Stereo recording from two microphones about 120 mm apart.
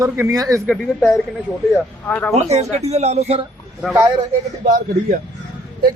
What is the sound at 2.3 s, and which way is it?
Speech, 65° right (ahead or behind).